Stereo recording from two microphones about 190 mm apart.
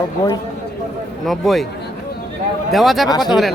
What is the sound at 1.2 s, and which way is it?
Speech, centre (ahead or behind).